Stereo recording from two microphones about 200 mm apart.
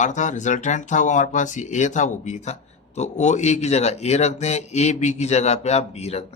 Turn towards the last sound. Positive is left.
turn(degrees=30)  # may be behind; listen again after turning